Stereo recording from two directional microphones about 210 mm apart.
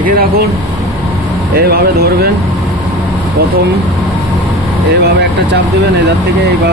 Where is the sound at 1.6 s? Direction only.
50° right (ahead or behind).